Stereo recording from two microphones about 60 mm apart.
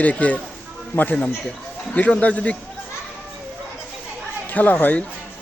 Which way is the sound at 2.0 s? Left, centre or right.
Left.